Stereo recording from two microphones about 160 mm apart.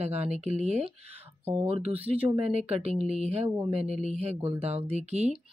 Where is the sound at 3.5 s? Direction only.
20° right (ahead or behind).